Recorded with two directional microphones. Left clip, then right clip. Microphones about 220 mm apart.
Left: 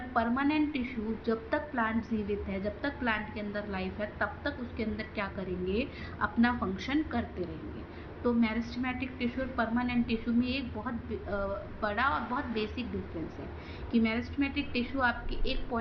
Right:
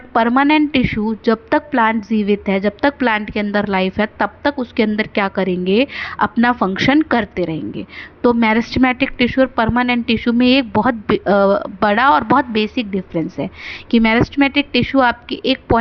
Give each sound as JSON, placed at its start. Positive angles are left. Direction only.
{"t": 0.1, "sound": "a woman's voice", "side_deg": -50}